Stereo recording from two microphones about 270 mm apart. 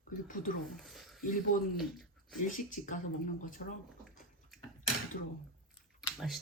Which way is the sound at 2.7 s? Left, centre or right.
Left.